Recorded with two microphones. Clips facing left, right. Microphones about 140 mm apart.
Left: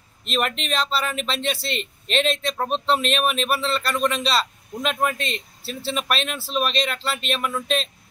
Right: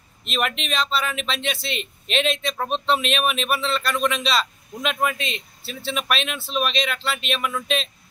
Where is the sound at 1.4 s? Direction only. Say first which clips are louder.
Left 2 dB; 35° left (ahead or behind).